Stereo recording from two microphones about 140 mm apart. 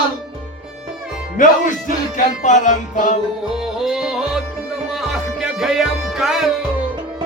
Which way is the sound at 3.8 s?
5° right (ahead or behind).